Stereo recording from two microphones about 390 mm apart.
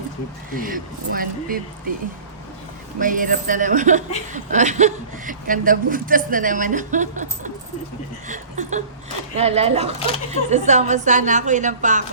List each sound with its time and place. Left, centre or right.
0.5 s speech: right
3.0 s a woman's voice: right